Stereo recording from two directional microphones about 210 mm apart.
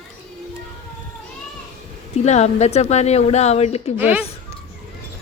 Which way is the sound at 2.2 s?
30° left (ahead or behind).